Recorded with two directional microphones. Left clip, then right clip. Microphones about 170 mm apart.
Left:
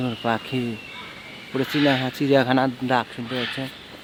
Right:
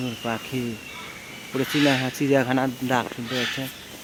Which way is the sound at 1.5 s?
Centre (ahead or behind).